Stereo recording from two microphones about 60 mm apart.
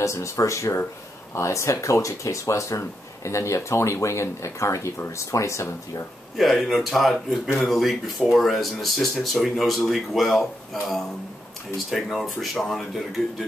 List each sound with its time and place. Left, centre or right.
0.0 s speech: left
6.3 s speech: centre